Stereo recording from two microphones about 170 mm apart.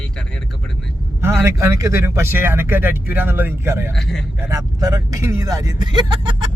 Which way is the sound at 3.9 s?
5° left (ahead or behind).